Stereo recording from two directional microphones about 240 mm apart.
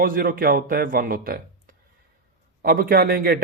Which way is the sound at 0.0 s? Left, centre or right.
Right.